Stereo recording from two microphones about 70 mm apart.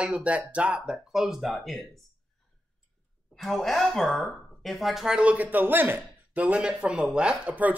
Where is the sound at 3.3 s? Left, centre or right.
Centre; by 7.7 s right.